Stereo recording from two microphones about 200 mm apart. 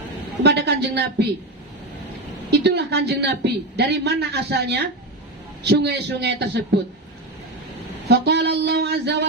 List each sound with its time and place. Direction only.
0.4 s a woman's voice: 55° right (ahead or behind)
2.5 s a woman's voice: 55° right (ahead or behind)
8.0 s a sound: 55° right (ahead or behind)